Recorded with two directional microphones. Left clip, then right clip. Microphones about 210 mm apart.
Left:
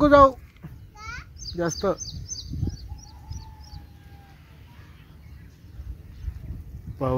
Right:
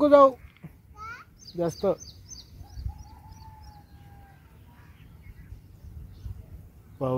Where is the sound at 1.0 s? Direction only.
35° right (ahead or behind).